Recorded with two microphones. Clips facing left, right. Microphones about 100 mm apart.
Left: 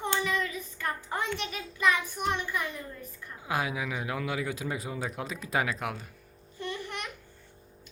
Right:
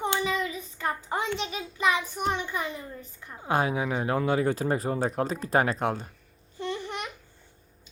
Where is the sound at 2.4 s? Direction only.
20° right (ahead or behind).